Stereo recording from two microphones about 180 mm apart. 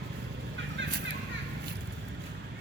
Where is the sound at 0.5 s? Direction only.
90° right.